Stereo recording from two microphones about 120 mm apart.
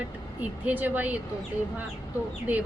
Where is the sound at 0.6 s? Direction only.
15° right (ahead or behind).